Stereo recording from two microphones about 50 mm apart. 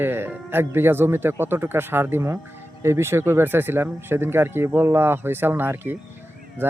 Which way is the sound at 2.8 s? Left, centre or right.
Right.